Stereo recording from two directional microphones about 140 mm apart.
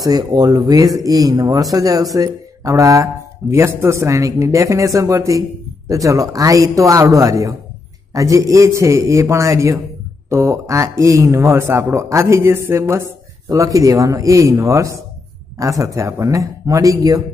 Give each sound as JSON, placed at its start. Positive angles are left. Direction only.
{"t": 0.0, "sound": "speech", "side_deg": -30}